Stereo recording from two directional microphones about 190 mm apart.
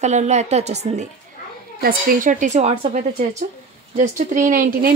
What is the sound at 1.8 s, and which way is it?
A woman's voice, 50° right (ahead or behind).